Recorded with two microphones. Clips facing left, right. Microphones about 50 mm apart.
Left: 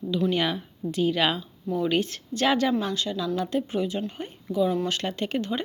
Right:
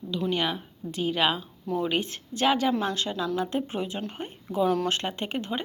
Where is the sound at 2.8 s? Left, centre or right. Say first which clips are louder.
Even; right.